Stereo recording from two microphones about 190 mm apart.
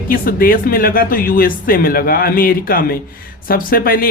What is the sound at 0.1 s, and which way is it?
Speech, 50° left (ahead or behind).